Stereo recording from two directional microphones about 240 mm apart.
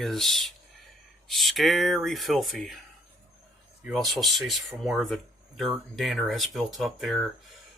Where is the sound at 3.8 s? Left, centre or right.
Centre.